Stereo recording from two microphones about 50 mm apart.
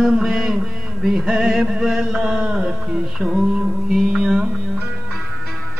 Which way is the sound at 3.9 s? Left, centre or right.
Centre.